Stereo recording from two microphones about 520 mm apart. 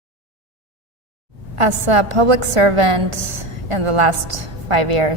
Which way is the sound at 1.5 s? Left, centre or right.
Right.